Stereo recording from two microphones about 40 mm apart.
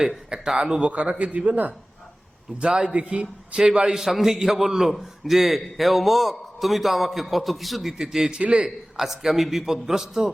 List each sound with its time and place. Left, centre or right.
0.3 s a man's voice: centre
0.9 s speech: right
2.6 s a man's voice: right; by 8.0 s centre
8.3 s speech: right
9.0 s a man's voice: centre